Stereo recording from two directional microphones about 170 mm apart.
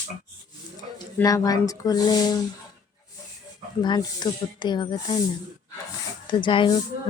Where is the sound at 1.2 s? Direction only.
20° left (ahead or behind).